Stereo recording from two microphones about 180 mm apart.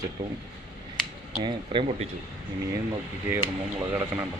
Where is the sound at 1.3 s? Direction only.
25° right (ahead or behind).